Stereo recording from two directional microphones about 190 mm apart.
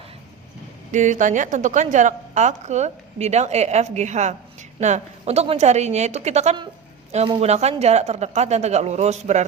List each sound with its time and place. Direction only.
0.9 s a woman's voice: 40° right (ahead or behind)